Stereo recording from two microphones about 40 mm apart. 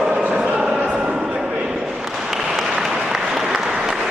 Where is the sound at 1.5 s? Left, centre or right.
Right.